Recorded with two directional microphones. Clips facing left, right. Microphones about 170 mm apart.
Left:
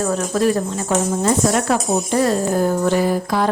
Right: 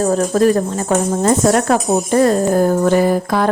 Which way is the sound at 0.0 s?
40° right (ahead or behind).